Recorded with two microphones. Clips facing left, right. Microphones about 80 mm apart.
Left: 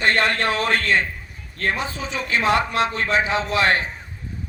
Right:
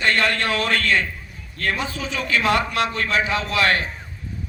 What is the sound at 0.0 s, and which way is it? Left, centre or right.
A man's voice, left.